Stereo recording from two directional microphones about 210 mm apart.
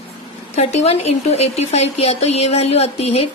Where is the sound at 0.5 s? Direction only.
30° left (ahead or behind).